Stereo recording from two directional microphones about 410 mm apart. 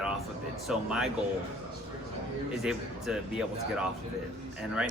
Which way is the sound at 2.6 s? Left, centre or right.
Centre.